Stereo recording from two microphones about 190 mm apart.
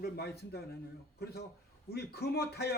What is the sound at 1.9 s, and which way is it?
Speech, 55° left (ahead or behind).